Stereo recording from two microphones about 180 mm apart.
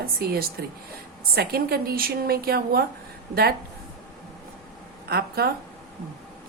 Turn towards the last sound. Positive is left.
turn(degrees=-60)  # may be behind; listen again after turning